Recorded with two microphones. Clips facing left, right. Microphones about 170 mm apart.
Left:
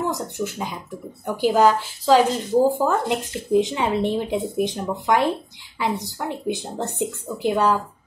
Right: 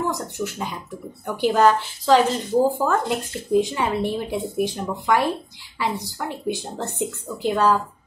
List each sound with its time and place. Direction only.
0.0 s speech: 15° left (ahead or behind)